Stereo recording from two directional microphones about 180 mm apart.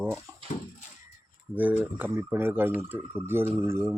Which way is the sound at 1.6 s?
10° right (ahead or behind).